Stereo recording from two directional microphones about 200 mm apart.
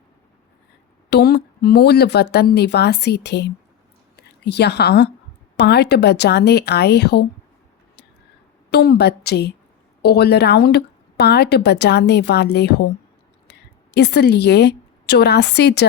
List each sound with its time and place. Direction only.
1.1 s a woman's voice: 55° left (ahead or behind)
8.7 s a woman's voice: 55° left (ahead or behind)